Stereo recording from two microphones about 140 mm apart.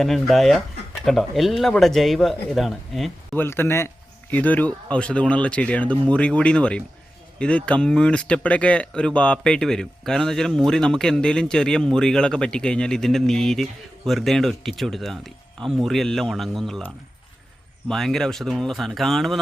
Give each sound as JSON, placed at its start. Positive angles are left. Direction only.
{"t": 0.0, "sound": "speech", "side_deg": 0}
{"t": 3.3, "sound": "speech", "side_deg": 15}